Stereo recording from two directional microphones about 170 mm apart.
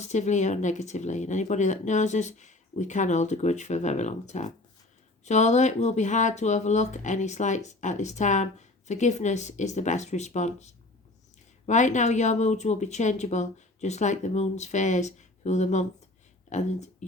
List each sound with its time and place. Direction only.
0.0 s speech: 45° left (ahead or behind)